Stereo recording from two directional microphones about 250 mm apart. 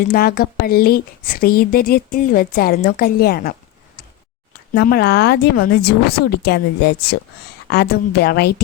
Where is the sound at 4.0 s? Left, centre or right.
Left.